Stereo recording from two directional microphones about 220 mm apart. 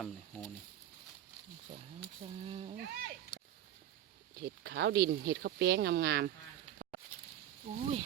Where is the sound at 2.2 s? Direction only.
25° right (ahead or behind).